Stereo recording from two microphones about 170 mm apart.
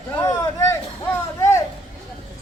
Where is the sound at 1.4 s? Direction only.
15° left (ahead or behind).